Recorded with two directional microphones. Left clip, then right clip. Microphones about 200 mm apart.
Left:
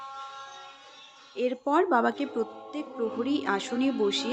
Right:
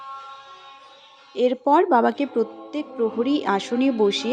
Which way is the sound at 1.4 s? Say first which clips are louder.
Right 8 dB; 20° right (ahead or behind).